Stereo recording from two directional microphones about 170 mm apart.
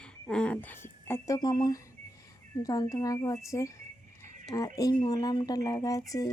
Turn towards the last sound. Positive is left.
turn(degrees=20)  # may be behind; listen again after turning